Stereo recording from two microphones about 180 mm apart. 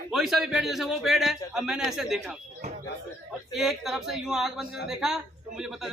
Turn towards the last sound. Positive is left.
turn(degrees=0)  # may be behind; listen again after turning